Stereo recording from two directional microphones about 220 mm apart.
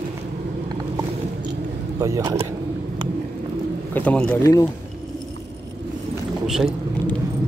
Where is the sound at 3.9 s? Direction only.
5° left (ahead or behind).